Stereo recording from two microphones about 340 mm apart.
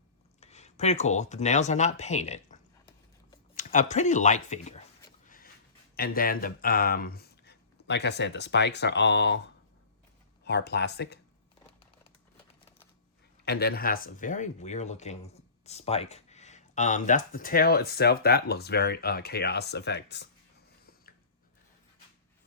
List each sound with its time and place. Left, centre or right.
0.3 s speech: centre
6.0 s speech: left
10.4 s speech: left
13.4 s speech: left